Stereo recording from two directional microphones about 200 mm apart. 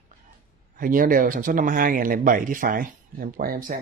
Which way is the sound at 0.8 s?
45° right (ahead or behind).